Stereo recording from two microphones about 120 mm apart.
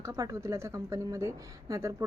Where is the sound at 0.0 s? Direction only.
25° right (ahead or behind).